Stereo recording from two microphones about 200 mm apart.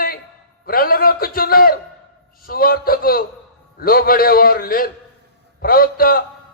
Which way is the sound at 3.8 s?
50° left (ahead or behind).